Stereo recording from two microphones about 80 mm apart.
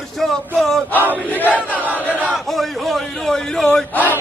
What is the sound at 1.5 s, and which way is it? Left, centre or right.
Battle cry, right.